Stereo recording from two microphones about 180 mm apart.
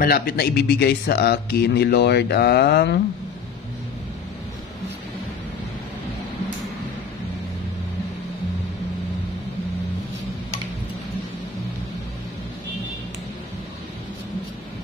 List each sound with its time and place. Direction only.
0.0 s speech: 55° left (ahead or behind)